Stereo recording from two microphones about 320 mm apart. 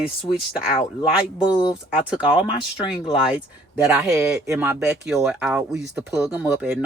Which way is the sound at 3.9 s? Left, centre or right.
Centre.